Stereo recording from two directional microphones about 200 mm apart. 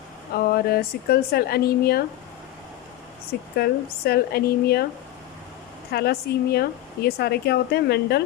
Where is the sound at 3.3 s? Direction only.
50° left (ahead or behind).